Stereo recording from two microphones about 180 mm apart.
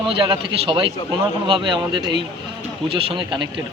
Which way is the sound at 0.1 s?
30° right (ahead or behind).